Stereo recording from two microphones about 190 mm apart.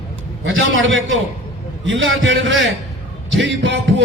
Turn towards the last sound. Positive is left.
turn(degrees=-70)  # may be behind; listen again after turning